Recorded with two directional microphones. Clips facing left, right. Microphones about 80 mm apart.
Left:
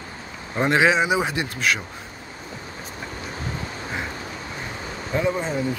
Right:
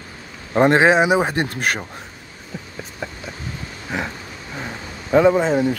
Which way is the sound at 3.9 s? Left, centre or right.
Right.